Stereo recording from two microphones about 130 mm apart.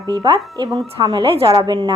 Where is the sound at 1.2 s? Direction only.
45° right (ahead or behind).